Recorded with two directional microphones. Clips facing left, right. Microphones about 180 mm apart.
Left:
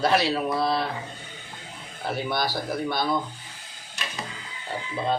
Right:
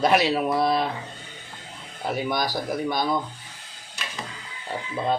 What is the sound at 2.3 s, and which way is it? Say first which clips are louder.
Speech: even; 15° right (ahead or behind).